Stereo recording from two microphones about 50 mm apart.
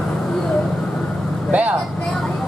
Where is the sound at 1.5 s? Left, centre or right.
Right.